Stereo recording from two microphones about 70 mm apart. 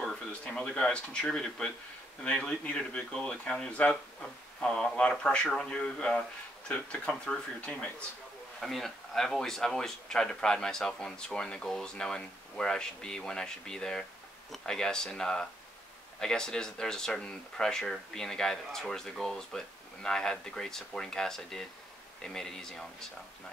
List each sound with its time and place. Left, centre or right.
0.0 s speech: centre